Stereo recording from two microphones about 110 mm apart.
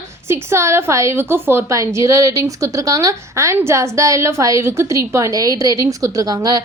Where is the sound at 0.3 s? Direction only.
25° right (ahead or behind).